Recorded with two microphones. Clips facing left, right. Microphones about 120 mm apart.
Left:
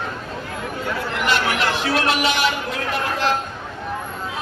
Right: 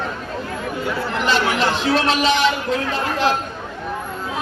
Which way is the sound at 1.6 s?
25° right (ahead or behind).